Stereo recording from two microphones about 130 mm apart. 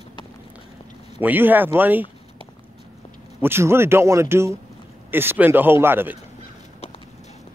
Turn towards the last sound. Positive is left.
turn(degrees=-15)  # may be behind; listen again after turning